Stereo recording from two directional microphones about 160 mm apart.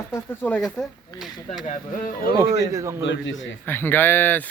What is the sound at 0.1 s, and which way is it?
Speech, 10° left (ahead or behind).